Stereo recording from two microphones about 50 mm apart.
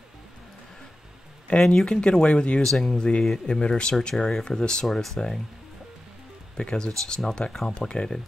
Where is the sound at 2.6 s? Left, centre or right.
Centre.